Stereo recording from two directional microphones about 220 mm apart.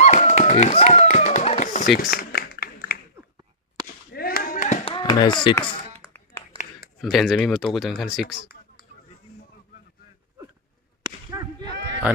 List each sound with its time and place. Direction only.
0.0 s a sound: 30° left (ahead or behind)
4.1 s chop: 45° left (ahead or behind)
4.9 s speech: 20° left (ahead or behind)
7.0 s speech: centre (ahead or behind)
11.0 s whip: 20° right (ahead or behind)